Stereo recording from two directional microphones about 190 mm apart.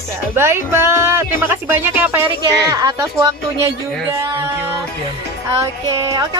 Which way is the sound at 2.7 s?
20° right (ahead or behind).